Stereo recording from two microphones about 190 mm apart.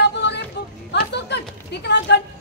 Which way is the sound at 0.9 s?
65° left (ahead or behind).